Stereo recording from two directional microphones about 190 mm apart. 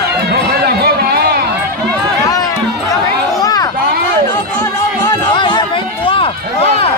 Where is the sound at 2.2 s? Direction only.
20° left (ahead or behind).